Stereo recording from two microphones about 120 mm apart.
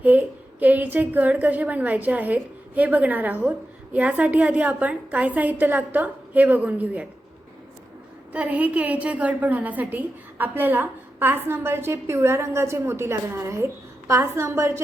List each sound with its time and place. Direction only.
0.0 s a woman's voice: 15° right (ahead or behind)
8.3 s a woman's voice: 15° right (ahead or behind)